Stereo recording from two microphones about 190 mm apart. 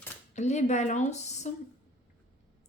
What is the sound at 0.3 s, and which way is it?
Speech, 35° left (ahead or behind).